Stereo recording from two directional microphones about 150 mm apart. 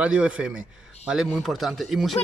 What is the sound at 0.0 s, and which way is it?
Speech, 10° right (ahead or behind).